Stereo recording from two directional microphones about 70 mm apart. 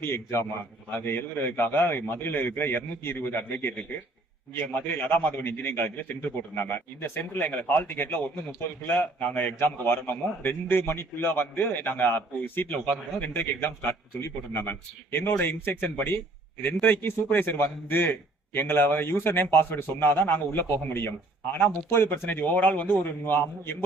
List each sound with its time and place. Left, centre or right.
0.0 s a man's voice: left
22.3 s a man's voice: left